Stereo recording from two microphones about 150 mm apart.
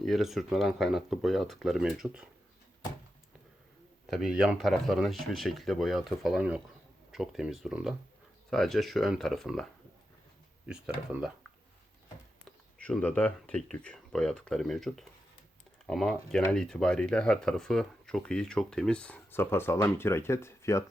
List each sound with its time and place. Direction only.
0.0 s speech: centre (ahead or behind)
4.1 s speech: 5° right (ahead or behind)
10.7 s speech: 5° right (ahead or behind)
12.8 s speech: 10° left (ahead or behind)